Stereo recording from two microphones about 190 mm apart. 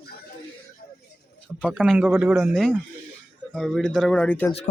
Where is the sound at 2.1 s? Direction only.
10° right (ahead or behind); by 4.4 s 10° left (ahead or behind).